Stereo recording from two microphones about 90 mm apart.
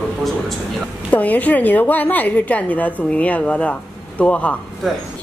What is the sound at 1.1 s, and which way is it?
A woman's voice, 20° left (ahead or behind).